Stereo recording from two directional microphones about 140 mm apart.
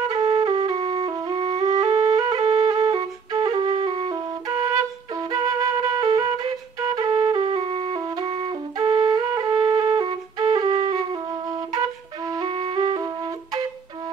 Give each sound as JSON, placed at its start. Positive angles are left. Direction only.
{"t": 0.1, "sound": "flute", "side_deg": -35}
{"t": 4.6, "sound": "flute", "side_deg": -25}
{"t": 12.3, "sound": "flute", "side_deg": -35}